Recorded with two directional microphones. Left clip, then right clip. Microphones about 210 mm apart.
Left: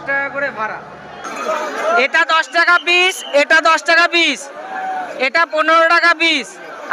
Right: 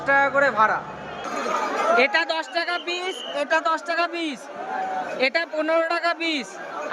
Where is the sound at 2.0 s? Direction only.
5° right (ahead or behind).